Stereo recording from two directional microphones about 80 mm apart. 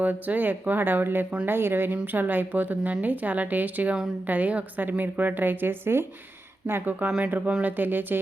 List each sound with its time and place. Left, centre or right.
0.0 s a woman's voice: right